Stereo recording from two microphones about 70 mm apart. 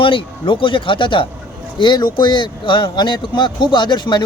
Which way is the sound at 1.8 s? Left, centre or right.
Left.